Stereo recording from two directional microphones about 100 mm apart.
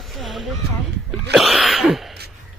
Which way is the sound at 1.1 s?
Centre (ahead or behind).